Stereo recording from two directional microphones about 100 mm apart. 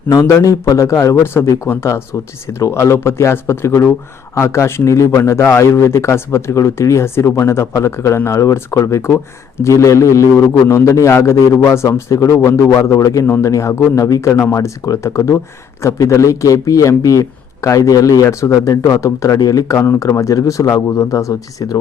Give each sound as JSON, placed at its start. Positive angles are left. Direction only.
{"t": 0.1, "sound": "a man's voice", "side_deg": 30}